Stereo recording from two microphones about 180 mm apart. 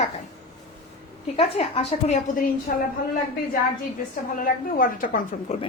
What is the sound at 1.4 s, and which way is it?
Speech, 30° left (ahead or behind).